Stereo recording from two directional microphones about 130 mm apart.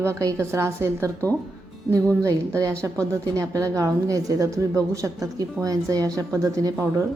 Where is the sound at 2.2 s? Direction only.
25° right (ahead or behind).